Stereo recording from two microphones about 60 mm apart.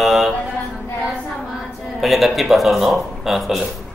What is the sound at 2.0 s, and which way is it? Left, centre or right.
Mantra, centre.